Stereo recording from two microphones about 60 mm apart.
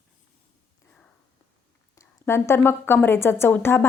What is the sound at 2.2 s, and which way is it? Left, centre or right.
A woman's voice, left.